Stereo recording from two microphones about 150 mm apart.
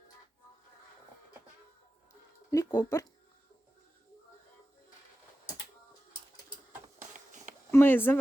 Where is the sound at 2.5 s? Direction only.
25° left (ahead or behind).